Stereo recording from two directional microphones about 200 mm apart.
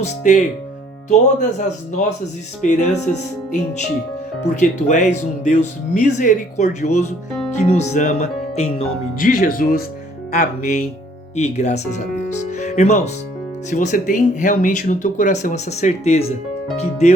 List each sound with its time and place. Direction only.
0.0 s speech: 35° left (ahead or behind)
9.1 s speech: 40° left (ahead or behind)